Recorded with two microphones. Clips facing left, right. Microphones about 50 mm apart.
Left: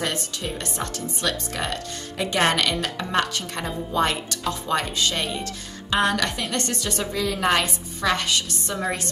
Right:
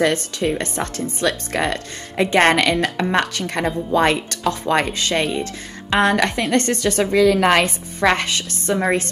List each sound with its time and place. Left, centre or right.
0.0 s speech: right
2.8 s speech: right
7.1 s a woman's voice: right
7.6 s speech: right